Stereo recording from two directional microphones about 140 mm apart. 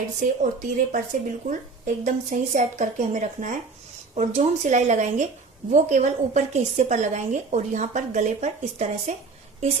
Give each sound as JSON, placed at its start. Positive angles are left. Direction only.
{"t": 0.2, "sound": "a woman's voice", "side_deg": -65}